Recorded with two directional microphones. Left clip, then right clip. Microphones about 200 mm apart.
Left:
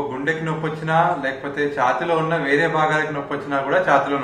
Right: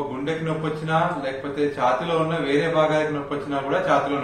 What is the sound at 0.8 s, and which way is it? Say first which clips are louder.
A man's voice: left 5 dB; 15° left (ahead or behind).